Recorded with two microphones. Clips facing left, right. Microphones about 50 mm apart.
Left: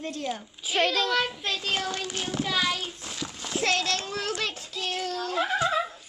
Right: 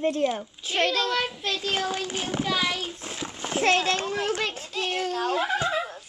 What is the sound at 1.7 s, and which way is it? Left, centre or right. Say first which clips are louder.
A child's voice: right 3 dB; centre.